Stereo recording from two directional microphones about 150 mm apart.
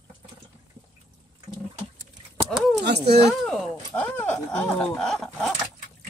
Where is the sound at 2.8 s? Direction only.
90° right.